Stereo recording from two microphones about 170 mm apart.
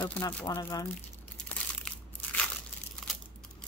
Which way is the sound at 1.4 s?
10° left (ahead or behind).